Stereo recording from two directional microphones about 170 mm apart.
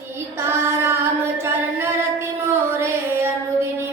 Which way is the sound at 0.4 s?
15° right (ahead or behind).